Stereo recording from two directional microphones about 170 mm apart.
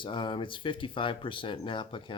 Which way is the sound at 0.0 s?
30° left (ahead or behind).